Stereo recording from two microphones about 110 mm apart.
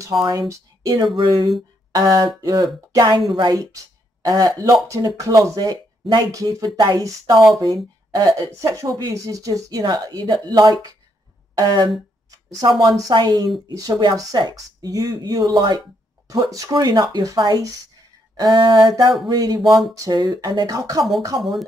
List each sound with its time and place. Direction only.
0.2 s speech: 35° right (ahead or behind)
7.3 s speech: centre (ahead or behind)
7.6 s speech: 35° right (ahead or behind)
19.6 s speech: centre (ahead or behind)
19.9 s speech: 40° right (ahead or behind)